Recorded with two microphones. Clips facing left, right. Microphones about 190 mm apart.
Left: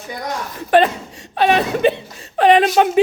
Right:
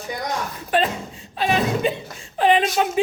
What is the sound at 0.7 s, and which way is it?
A man's voice, 70° left (ahead or behind).